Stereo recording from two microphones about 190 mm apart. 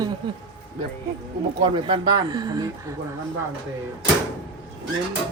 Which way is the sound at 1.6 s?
25° right (ahead or behind).